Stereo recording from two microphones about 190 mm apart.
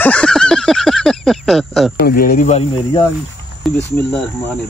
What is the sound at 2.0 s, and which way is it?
Speech, 50° left (ahead or behind).